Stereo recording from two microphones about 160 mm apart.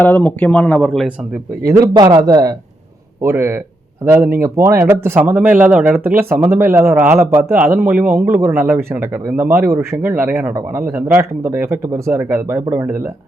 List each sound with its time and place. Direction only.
0.0 s speech: 10° left (ahead or behind)
1.6 s a man's voice: 25° right (ahead or behind)